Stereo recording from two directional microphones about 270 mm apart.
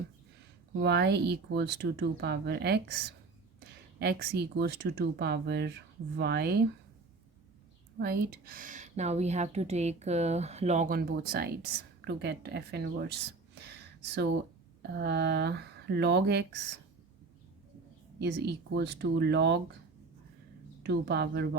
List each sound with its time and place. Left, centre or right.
0.8 s speech: right
7.9 s speech: right
14.8 s speech: right
18.2 s speech: right
20.8 s speech: right